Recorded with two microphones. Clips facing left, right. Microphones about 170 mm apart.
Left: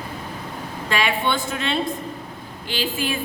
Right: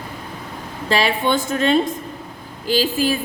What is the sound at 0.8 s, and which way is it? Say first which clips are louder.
Speech: right 4 dB; 35° right (ahead or behind).